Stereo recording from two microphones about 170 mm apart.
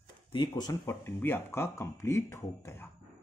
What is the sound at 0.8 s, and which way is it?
Speech, 15° left (ahead or behind).